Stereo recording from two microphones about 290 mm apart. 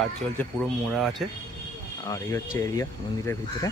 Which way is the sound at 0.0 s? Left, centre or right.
Centre.